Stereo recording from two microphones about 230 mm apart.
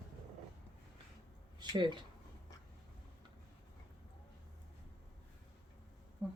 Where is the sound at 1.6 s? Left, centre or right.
Centre.